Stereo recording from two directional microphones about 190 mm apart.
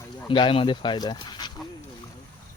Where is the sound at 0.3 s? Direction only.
25° left (ahead or behind).